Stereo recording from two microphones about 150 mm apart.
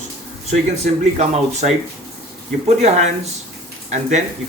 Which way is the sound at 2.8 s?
50° right (ahead or behind).